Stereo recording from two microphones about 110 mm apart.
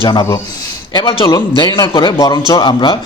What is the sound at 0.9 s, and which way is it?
A man's voice, 40° left (ahead or behind).